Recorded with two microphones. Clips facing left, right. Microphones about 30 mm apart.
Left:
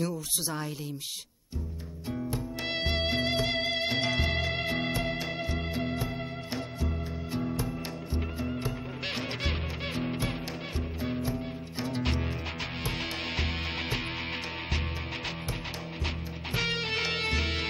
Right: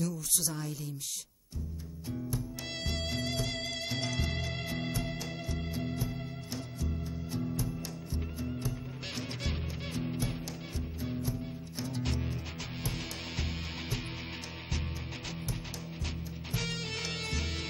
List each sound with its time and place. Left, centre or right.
0.0 s speech: left
2.0 s music: left
13.4 s music: left
16.5 s music: left